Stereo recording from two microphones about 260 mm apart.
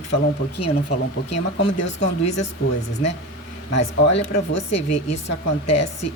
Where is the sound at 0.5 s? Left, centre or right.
Left.